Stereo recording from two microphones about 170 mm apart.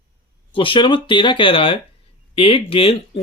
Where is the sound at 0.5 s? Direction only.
30° left (ahead or behind).